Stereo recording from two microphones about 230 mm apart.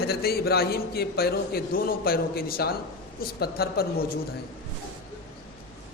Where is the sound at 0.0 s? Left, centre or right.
Left.